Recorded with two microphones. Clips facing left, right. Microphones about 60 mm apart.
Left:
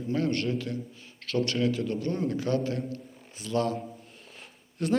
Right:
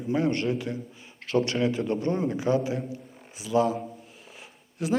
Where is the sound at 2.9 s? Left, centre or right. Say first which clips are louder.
Even; centre.